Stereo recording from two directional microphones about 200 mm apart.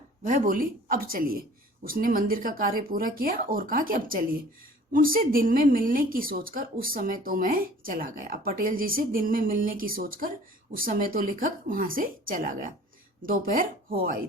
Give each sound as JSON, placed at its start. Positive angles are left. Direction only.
{"t": 0.3, "sound": "a woman's voice", "side_deg": -45}